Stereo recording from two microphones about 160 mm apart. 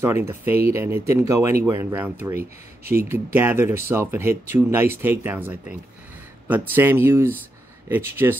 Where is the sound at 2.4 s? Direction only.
70° right (ahead or behind).